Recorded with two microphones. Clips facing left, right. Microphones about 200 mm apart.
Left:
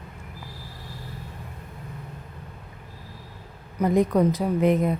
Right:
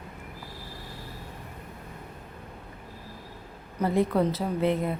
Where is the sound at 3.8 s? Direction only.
15° left (ahead or behind).